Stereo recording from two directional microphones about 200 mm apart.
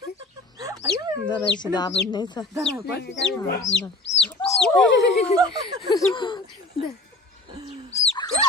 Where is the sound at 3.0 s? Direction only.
60° left (ahead or behind).